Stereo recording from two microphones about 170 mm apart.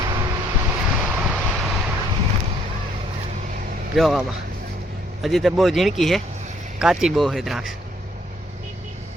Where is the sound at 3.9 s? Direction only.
Centre (ahead or behind).